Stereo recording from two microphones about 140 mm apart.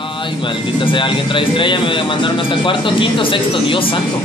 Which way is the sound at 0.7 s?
35° left (ahead or behind).